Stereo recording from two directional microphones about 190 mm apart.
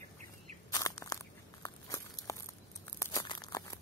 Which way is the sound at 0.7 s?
15° left (ahead or behind).